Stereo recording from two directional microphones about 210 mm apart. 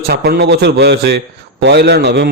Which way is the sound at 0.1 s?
50° right (ahead or behind).